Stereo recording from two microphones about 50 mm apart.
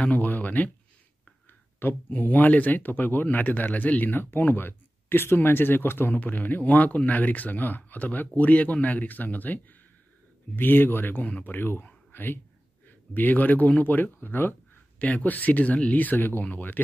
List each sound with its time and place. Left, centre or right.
0.0 s speech: left
2.0 s speech: left
6.1 s speech: left
11.2 s speech: left
11.5 s speech: left
12.1 s whispering: left
12.8 s speech: left
15.0 s speech: left